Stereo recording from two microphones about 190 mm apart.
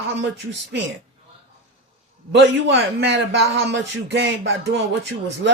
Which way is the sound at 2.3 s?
65° right (ahead or behind).